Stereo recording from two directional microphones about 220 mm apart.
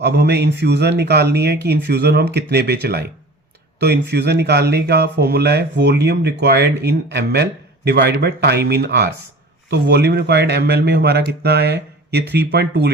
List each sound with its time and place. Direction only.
0.0 s speech: 50° right (ahead or behind)